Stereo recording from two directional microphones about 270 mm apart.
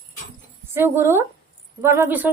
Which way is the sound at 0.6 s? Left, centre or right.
Centre.